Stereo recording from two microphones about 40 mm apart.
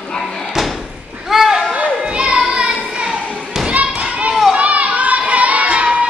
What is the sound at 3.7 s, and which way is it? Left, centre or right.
Thump, right.